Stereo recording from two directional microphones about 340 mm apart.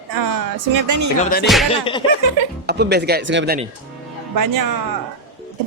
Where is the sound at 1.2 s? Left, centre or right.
Left.